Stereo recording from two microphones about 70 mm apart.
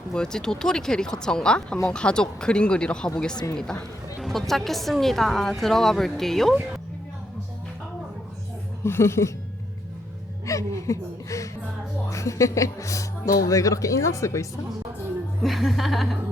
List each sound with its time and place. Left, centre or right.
0.1 s speech: centre
8.8 s speech: left
10.4 s speech: left
15.4 s speech: centre